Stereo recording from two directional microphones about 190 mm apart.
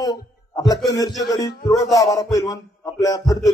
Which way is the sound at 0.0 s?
20° left (ahead or behind).